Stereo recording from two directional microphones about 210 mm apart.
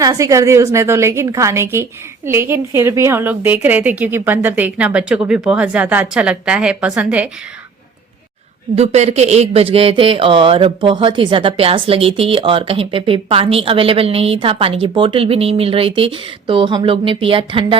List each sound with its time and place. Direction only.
0.0 s a woman's voice: 15° right (ahead or behind)
8.7 s speech: 30° right (ahead or behind)